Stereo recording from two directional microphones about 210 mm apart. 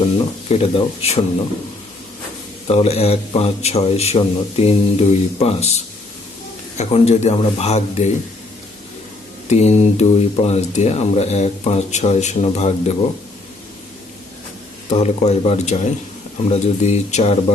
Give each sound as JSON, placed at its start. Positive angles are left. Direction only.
{"t": 0.4, "sound": "a man's voice", "side_deg": 30}
{"t": 2.6, "sound": "a man's voice", "side_deg": 30}
{"t": 9.5, "sound": "speech", "side_deg": 30}
{"t": 14.8, "sound": "speech", "side_deg": 30}